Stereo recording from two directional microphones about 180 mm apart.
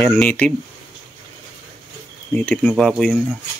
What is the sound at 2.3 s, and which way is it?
Speech, 10° left (ahead or behind).